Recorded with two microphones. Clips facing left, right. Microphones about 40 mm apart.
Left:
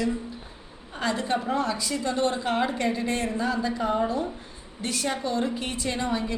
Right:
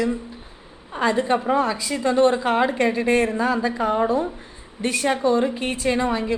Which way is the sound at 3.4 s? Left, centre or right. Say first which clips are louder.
Right 5 dB; right.